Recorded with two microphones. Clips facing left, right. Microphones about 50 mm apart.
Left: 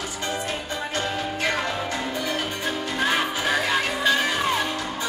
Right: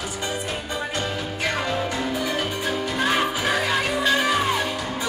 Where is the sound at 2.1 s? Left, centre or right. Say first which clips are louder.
Right 2 dB; centre.